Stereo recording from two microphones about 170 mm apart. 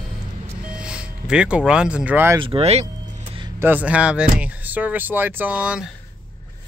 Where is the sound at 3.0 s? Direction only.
30° right (ahead or behind).